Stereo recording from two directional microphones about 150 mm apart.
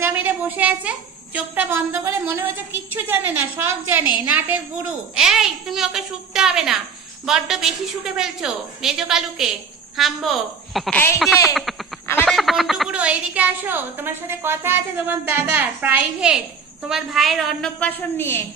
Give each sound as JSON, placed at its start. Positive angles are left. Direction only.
{"t": 0.0, "sound": "a woman's voice", "side_deg": -15}
{"t": 12.3, "sound": "a woman's voice", "side_deg": 0}